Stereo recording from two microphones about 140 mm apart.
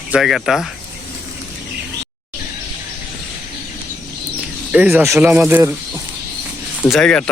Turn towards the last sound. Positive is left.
turn(degrees=5)  # may be behind; listen again after turning